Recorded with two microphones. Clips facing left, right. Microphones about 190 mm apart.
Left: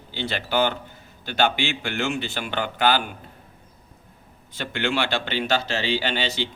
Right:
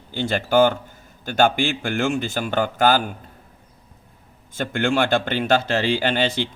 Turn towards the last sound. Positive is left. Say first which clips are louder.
# right 5 dB
turn(degrees=-50)  # may be behind; listen again after turning